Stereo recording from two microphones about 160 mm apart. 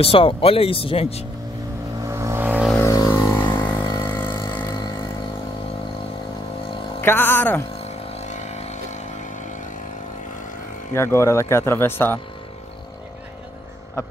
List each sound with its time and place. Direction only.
0.0 s speech: 35° left (ahead or behind)
2.0 s vehicle: 15° right (ahead or behind)
2.8 s music: 20° left (ahead or behind)
3.5 s a sound: 10° left (ahead or behind)
3.8 s vehicle: 20° left (ahead or behind)
4.6 s a sound: 20° left (ahead or behind)
7.0 s speech: 15° left (ahead or behind)
7.7 s vehicle: 40° left (ahead or behind)
11.0 s speech: 15° left (ahead or behind)